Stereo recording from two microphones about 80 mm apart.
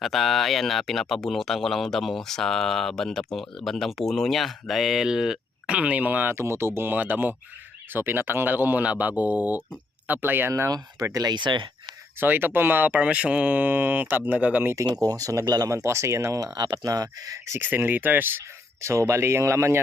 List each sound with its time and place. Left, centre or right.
0.0 s speech: centre; by 6.3 s right
6.3 s speech: right
10.5 s speech: right
12.2 s speech: right
15.0 s speech: right
16.6 s speech: right
17.6 s speech: right